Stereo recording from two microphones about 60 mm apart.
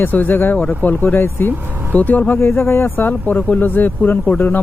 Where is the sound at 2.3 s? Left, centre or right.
Left.